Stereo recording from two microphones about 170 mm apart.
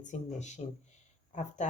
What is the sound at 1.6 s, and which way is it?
Speech, 45° left (ahead or behind).